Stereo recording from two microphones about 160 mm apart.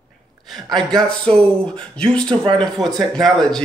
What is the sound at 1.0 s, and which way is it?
A man's voice, 5° left (ahead or behind).